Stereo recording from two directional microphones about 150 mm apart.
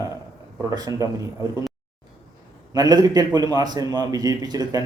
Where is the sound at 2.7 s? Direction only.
25° right (ahead or behind).